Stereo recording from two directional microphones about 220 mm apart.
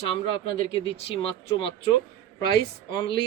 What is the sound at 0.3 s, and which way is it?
Speech, 25° left (ahead or behind).